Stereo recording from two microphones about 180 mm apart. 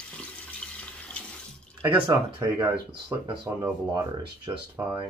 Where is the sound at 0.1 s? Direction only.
5° left (ahead or behind).